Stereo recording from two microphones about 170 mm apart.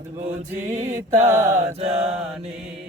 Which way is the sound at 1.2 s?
15° right (ahead or behind).